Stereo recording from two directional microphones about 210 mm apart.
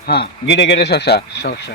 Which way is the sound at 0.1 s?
50° left (ahead or behind).